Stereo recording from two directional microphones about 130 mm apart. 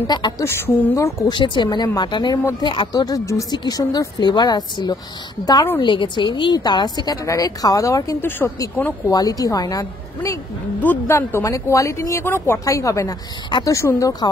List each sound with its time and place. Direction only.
0.0 s a woman's voice: 35° left (ahead or behind)
1.3 s a woman's voice: 35° left (ahead or behind); by 8.9 s 15° left (ahead or behind)
9.1 s a woman's voice: 30° left (ahead or behind)
10.8 s a woman's voice: 15° left (ahead or behind)